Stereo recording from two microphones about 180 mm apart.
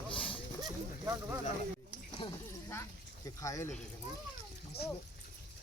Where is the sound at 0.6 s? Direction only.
15° right (ahead or behind).